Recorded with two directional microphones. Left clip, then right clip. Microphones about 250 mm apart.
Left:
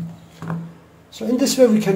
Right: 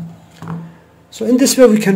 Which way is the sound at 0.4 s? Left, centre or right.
Centre.